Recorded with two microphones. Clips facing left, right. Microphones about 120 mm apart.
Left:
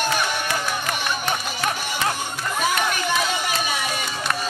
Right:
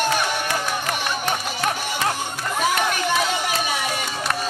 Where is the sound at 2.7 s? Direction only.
40° right (ahead or behind).